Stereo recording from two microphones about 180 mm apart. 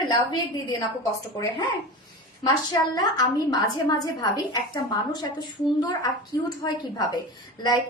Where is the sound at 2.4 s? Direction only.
20° left (ahead or behind).